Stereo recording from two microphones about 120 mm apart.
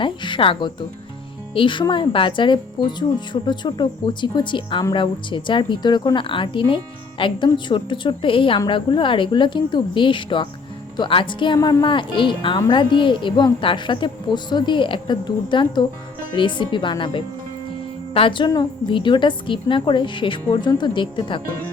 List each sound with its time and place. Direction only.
0.0 s music: 45° left (ahead or behind)
1.5 s a woman's voice: 45° left (ahead or behind)